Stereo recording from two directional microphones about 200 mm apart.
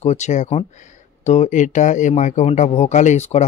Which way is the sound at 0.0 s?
35° left (ahead or behind).